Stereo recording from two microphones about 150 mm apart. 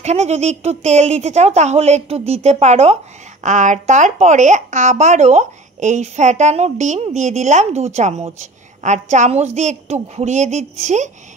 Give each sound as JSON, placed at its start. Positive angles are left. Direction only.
{"t": 0.0, "sound": "speech", "side_deg": -50}